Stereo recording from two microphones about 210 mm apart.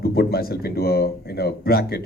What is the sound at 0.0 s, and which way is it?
Speech, 50° left (ahead or behind).